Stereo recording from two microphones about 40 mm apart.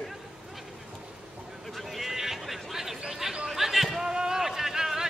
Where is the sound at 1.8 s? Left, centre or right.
Centre.